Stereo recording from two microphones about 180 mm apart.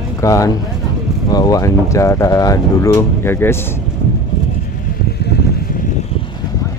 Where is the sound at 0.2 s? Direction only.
20° left (ahead or behind).